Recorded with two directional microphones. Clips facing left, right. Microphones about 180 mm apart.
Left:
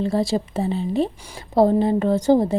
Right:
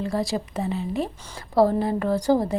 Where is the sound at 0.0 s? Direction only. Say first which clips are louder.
Left 5 dB; 25° left (ahead or behind).